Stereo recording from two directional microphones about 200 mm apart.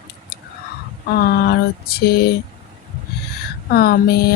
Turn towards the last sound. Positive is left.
turn(degrees=50)  # may be behind; listen again after turning